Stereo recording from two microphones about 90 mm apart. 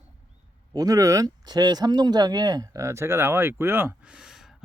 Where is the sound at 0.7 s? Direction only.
40° right (ahead or behind); by 3.9 s 25° right (ahead or behind).